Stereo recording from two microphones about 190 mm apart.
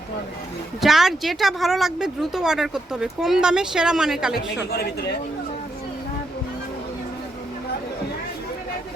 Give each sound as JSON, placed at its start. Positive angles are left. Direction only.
{"t": 0.8, "sound": "speech", "side_deg": 0}
{"t": 4.7, "sound": "a man's voice", "side_deg": 60}